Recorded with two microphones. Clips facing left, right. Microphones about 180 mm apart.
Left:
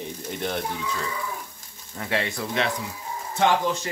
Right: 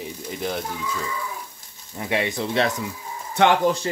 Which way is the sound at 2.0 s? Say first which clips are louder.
Right 3 dB; 15° right (ahead or behind).